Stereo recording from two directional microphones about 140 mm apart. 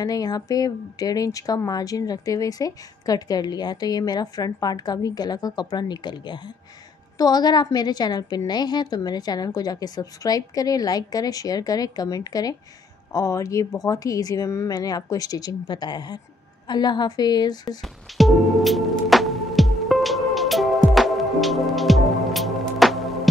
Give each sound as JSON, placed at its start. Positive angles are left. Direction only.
{"t": 0.0, "sound": "speech", "side_deg": 25}
{"t": 17.8, "sound": "music", "side_deg": 0}